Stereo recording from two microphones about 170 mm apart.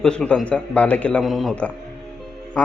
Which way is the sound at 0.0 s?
5° left (ahead or behind).